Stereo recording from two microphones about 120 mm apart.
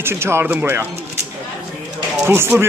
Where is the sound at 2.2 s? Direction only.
20° right (ahead or behind).